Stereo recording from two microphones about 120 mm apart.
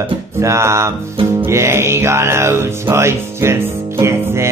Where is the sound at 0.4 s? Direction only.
25° right (ahead or behind).